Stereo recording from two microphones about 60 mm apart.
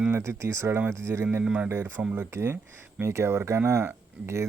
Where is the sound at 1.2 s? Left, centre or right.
Right.